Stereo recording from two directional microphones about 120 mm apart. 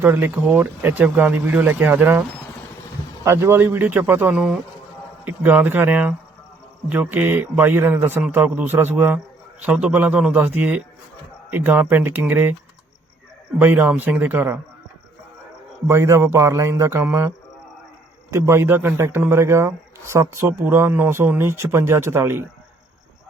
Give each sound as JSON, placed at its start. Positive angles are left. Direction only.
{"t": 0.0, "sound": "speech", "side_deg": -15}
{"t": 3.2, "sound": "speech", "side_deg": -20}
{"t": 4.4, "sound": "speech", "side_deg": -5}
{"t": 13.6, "sound": "speech", "side_deg": -15}
{"t": 15.9, "sound": "a man's voice", "side_deg": -25}